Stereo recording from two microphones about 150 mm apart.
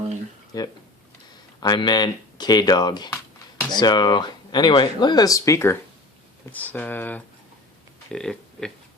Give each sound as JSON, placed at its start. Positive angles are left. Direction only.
{"t": 0.5, "sound": "speech", "side_deg": 25}